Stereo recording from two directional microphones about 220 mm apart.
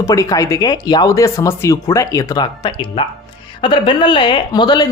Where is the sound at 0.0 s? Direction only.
15° left (ahead or behind).